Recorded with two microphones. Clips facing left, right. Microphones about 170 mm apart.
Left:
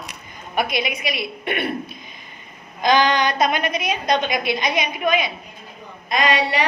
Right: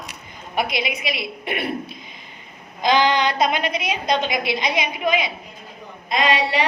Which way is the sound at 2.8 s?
20° right (ahead or behind).